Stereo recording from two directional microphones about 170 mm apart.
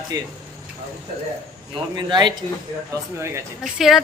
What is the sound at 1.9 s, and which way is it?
Speech, 25° right (ahead or behind).